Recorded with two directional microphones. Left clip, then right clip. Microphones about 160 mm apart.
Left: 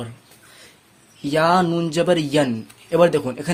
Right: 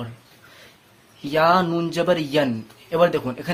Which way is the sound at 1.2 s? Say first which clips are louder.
Even; 30° left (ahead or behind).